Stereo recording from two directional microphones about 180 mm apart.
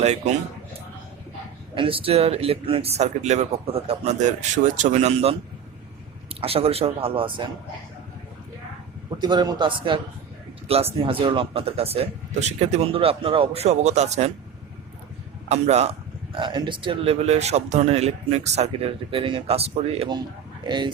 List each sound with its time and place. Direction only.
0.0 s speech: 40° right (ahead or behind)
1.7 s speech: 30° right (ahead or behind)
6.4 s speech: 35° right (ahead or behind)
9.1 s speech: 25° right (ahead or behind)
15.4 s speech: 40° right (ahead or behind)